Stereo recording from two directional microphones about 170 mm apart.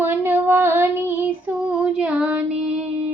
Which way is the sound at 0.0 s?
10° right (ahead or behind).